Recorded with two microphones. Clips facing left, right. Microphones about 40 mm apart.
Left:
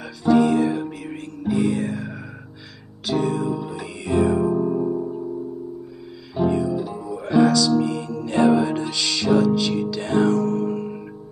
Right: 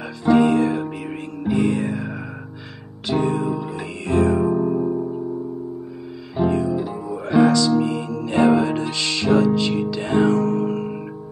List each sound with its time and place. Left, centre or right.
0.2 s music: centre
3.1 s music: right
6.3 s music: centre